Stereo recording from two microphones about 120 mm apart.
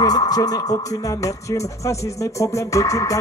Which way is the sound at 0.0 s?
30° left (ahead or behind).